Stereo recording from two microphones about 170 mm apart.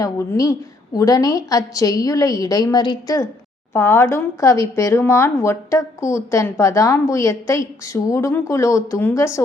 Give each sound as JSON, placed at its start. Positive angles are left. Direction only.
{"t": 0.0, "sound": "a woman's voice", "side_deg": 20}